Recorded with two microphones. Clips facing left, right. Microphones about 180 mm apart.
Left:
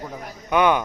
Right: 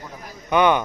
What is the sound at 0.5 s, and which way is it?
Speech, 5° left (ahead or behind).